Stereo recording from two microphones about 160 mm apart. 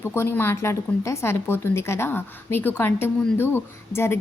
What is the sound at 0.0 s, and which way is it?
A woman's voice, 15° left (ahead or behind).